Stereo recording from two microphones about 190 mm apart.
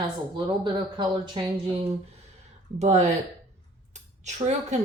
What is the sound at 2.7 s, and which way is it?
Speech, 35° right (ahead or behind).